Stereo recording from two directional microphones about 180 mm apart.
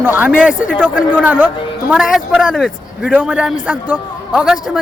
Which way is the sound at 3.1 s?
5° right (ahead or behind).